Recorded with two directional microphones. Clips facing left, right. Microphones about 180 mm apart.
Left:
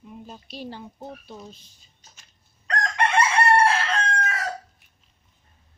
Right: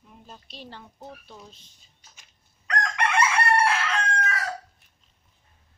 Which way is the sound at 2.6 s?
30° left (ahead or behind).